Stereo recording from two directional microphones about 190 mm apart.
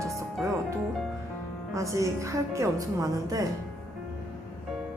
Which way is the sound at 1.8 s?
15° right (ahead or behind).